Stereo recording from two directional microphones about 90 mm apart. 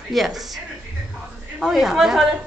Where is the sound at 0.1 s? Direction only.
Centre (ahead or behind).